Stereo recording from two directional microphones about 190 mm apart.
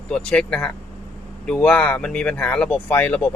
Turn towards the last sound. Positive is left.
turn(degrees=10)  # may be behind; listen again after turning